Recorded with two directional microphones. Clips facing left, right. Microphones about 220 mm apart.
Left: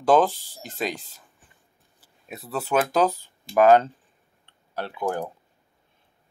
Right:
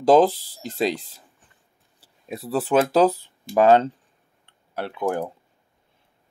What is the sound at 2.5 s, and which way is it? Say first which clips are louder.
Speech: right 4 dB; 30° right (ahead or behind).